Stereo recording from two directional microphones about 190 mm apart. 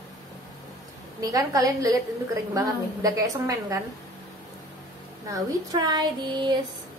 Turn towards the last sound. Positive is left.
turn(degrees=-20)  # may be behind; listen again after turning